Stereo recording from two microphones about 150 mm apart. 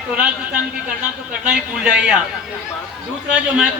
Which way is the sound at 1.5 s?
5° right (ahead or behind).